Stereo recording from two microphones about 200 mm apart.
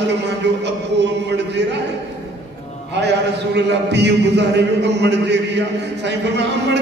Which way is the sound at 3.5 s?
60° right (ahead or behind).